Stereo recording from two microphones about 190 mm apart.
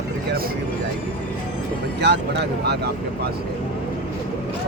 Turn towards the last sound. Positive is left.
turn(degrees=-60)  # may be behind; listen again after turning